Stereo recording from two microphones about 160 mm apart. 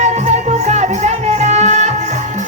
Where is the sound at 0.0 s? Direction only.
45° right (ahead or behind).